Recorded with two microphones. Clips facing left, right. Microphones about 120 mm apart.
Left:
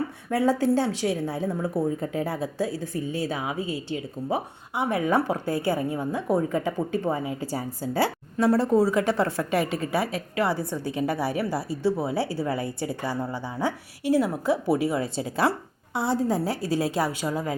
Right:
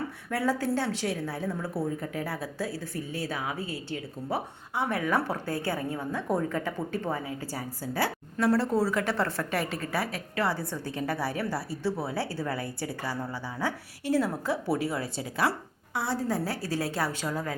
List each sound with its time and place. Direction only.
0.3 s speech: 20° left (ahead or behind)